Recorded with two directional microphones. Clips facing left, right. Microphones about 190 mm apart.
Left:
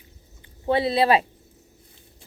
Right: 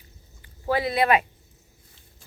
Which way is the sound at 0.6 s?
25° left (ahead or behind).